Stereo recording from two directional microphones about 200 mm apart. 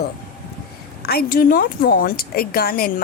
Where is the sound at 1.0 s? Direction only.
50° left (ahead or behind).